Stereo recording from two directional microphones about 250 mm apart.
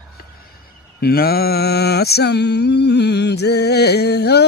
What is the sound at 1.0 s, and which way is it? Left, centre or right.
Mantra, left.